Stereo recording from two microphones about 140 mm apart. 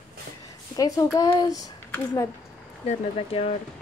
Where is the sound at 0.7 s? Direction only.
25° left (ahead or behind).